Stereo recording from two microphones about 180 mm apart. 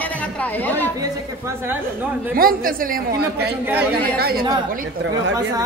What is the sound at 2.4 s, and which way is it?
A woman's voice, 55° right (ahead or behind).